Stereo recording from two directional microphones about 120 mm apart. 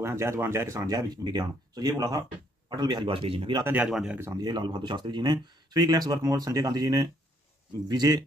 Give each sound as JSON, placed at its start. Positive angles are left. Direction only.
{"t": 0.0, "sound": "speech", "side_deg": -20}
{"t": 3.6, "sound": "speech", "side_deg": -15}
{"t": 4.4, "sound": "speech", "side_deg": -35}